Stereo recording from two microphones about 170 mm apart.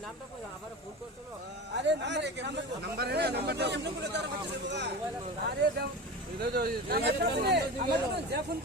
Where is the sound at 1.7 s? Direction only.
90° right.